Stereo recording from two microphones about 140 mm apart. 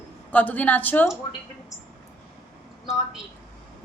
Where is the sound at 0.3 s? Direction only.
10° left (ahead or behind).